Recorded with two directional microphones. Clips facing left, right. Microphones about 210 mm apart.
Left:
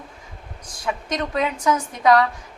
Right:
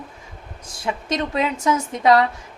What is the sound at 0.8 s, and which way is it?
Speech, 25° right (ahead or behind).